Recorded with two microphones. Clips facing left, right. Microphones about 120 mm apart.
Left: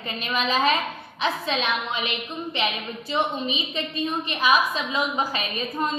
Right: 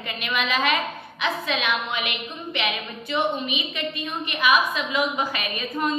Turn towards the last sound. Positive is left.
turn(degrees=30)  # may be behind; listen again after turning